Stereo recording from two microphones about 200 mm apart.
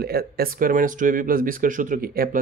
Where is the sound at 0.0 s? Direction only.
50° right (ahead or behind).